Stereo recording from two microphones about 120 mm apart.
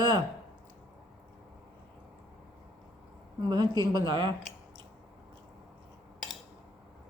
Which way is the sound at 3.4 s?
35° right (ahead or behind).